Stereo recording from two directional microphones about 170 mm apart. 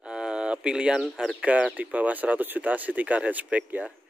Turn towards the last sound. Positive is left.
turn(degrees=-10)  # may be behind; listen again after turning